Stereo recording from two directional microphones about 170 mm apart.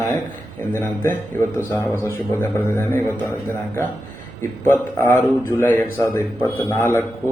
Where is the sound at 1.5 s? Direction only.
15° left (ahead or behind).